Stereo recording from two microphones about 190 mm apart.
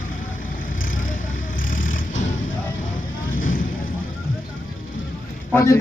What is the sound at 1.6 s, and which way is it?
Vehicle, 45° left (ahead or behind).